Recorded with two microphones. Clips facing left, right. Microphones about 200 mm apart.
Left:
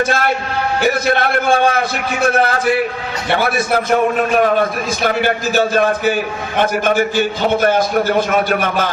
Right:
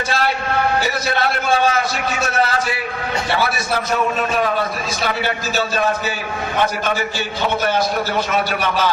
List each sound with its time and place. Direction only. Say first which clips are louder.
0.8 s a man's voice: left 5 dB; 50° left (ahead or behind)